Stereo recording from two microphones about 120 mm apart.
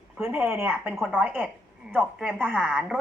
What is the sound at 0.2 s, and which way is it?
Speech, 15° right (ahead or behind).